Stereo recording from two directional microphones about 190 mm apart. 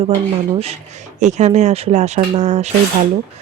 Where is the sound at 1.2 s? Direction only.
40° right (ahead or behind).